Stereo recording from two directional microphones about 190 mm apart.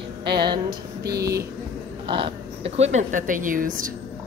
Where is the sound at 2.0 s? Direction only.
25° right (ahead or behind).